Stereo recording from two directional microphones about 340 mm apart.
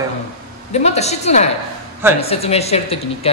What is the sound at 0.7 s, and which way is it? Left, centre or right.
A woman's voice, centre.